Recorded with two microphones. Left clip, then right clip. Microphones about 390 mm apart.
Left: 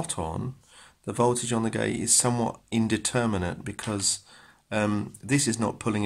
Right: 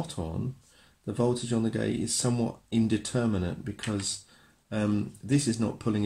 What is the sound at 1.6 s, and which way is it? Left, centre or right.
Speech, centre.